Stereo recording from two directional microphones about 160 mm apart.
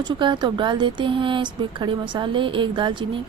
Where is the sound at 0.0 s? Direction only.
30° right (ahead or behind).